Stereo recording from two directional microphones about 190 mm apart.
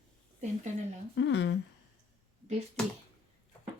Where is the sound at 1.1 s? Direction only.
70° left (ahead or behind).